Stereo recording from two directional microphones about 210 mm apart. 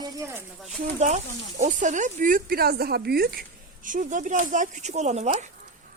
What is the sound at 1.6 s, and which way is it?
A woman's voice, 35° right (ahead or behind).